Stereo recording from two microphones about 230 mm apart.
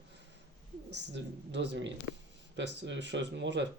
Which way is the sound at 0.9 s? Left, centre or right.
Right.